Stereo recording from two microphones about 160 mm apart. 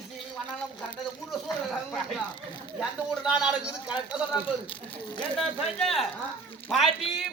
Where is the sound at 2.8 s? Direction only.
5° right (ahead or behind).